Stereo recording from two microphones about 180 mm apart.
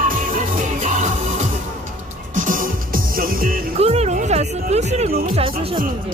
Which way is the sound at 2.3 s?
50° right (ahead or behind).